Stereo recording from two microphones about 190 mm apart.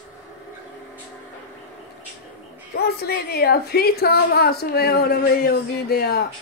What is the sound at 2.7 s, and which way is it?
A woman's voice, 55° left (ahead or behind).